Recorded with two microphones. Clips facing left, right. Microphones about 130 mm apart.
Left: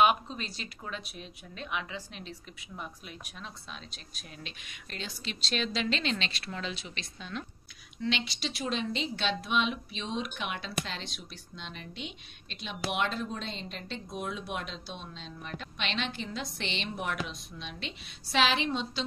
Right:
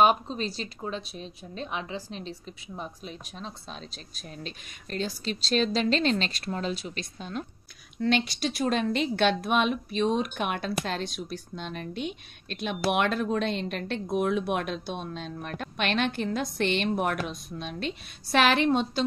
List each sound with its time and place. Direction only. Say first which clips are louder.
0.0 s a woman's voice: right 3 dB; 35° right (ahead or behind); by 19.0 s 55° right (ahead or behind)